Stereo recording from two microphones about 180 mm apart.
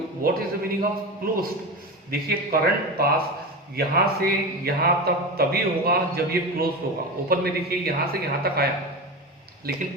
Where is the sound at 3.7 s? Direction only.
60° right (ahead or behind).